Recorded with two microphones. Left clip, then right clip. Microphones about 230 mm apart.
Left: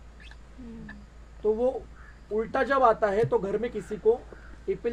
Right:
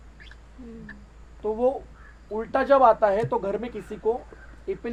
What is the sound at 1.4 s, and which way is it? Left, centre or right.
A woman's voice, right.